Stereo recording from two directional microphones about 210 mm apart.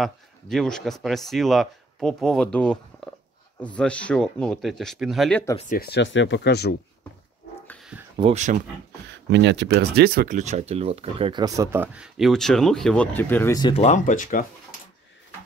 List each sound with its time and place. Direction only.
0.0 s speech: centre (ahead or behind)
5.6 s speech: 40° left (ahead or behind)
7.6 s dog: 5° left (ahead or behind)
8.2 s speech: 30° right (ahead or behind)
9.3 s speech: 60° right (ahead or behind); by 13.7 s 15° left (ahead or behind)
13.7 s speech: 35° left (ahead or behind)